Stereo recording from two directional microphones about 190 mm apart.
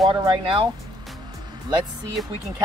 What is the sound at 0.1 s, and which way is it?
Speech, 25° right (ahead or behind).